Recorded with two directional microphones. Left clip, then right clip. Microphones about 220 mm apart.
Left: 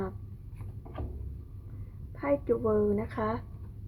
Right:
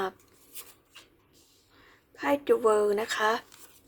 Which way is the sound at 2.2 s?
20° right (ahead or behind).